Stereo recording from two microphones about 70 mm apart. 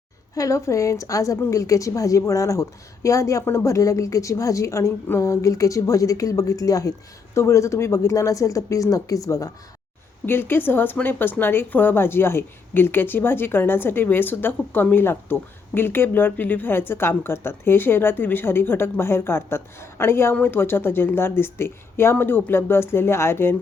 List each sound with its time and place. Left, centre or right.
0.3 s speech: left
7.3 s speech: left
10.2 s a woman's voice: left